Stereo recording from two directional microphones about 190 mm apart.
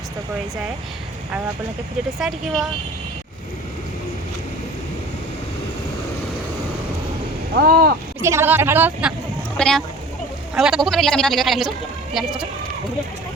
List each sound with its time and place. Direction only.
2.1 s speech: centre (ahead or behind)
7.5 s speech: 50° right (ahead or behind)
8.2 s a woman's voice: 15° right (ahead or behind)
9.6 s speech: 5° left (ahead or behind)